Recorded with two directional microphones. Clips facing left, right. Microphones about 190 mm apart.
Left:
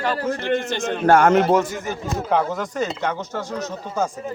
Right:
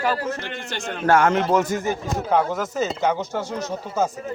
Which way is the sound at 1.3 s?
40° left (ahead or behind).